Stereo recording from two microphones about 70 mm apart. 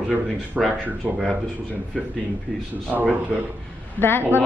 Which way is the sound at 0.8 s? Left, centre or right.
Right.